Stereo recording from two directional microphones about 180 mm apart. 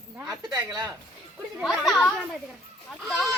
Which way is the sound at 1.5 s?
Centre (ahead or behind).